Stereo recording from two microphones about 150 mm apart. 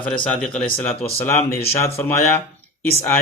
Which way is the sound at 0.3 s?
5° left (ahead or behind).